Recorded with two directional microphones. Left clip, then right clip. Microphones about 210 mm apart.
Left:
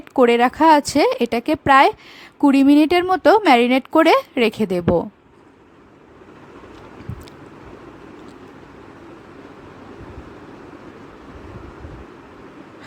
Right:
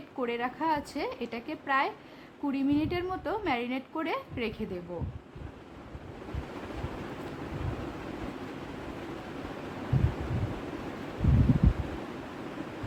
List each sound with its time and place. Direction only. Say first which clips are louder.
0.2 s a woman's voice: left 18 dB; 50° left (ahead or behind)